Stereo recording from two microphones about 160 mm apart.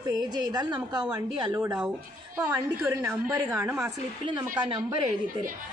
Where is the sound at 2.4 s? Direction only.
15° right (ahead or behind).